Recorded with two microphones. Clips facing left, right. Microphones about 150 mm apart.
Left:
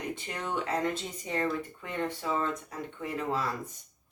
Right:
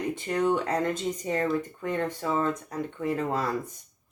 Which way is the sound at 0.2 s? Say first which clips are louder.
Right 9 dB; 45° right (ahead or behind).